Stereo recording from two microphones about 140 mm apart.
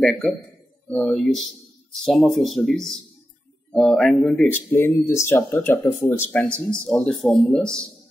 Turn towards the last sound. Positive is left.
turn(degrees=5)  # may be behind; listen again after turning